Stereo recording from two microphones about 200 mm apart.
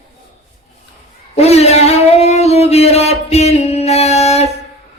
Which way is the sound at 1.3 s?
30° left (ahead or behind).